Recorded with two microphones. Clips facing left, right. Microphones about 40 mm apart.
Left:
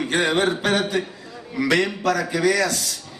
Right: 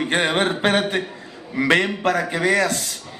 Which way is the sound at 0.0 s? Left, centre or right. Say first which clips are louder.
Even; right.